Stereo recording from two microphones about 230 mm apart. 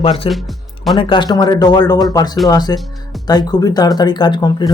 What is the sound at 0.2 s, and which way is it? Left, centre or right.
Speech, left.